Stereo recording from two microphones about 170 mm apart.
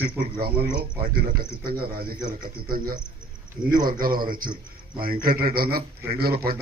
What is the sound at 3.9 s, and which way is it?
Speech, 60° right (ahead or behind).